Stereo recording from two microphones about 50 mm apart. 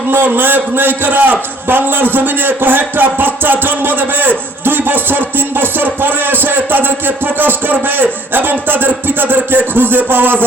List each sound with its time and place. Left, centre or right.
0.1 s a man's voice: right